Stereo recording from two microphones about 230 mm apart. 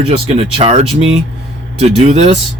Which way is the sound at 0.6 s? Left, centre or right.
Right.